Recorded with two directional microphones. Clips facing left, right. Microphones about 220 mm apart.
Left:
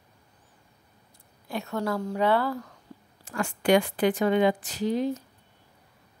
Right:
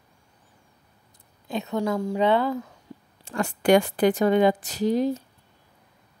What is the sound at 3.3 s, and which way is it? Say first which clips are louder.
A woman's voice: right 3 dB; 35° right (ahead or behind).